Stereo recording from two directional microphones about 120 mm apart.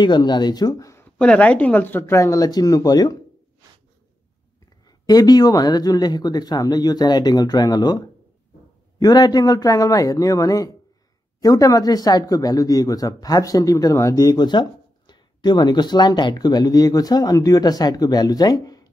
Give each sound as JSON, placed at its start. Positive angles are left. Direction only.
{"t": 0.0, "sound": "speech", "side_deg": 35}
{"t": 1.2, "sound": "speech", "side_deg": 10}
{"t": 4.8, "sound": "speech", "side_deg": 35}